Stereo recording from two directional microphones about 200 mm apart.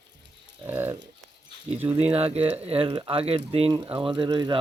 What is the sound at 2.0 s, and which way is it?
Speech, 30° right (ahead or behind).